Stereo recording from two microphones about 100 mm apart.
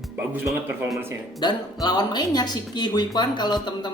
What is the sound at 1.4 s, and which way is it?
A woman's voice, 45° left (ahead or behind).